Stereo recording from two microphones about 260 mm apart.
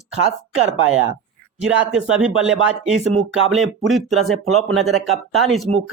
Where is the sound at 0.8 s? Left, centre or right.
Right.